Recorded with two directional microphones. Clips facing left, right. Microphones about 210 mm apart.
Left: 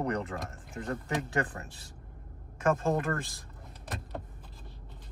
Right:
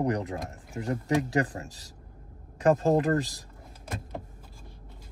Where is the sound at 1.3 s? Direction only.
35° right (ahead or behind).